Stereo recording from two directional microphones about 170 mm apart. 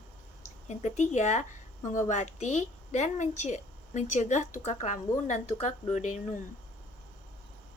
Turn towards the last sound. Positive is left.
turn(degrees=45)  # may be behind; listen again after turning